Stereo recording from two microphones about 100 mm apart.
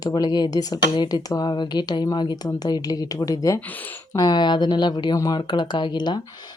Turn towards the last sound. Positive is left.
turn(degrees=45)  # may be behind; listen again after turning